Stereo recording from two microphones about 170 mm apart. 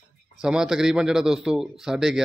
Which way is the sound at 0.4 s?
5° right (ahead or behind).